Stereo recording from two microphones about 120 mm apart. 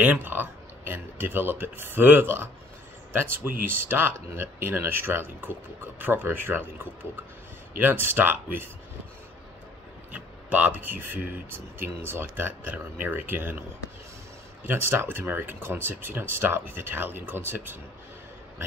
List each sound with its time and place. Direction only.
0.0 s speech: 15° right (ahead or behind)
7.7 s speech: 15° right (ahead or behind)
10.1 s speech: 15° right (ahead or behind)